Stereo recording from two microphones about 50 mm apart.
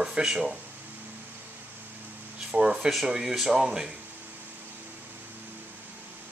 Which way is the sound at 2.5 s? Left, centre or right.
Centre.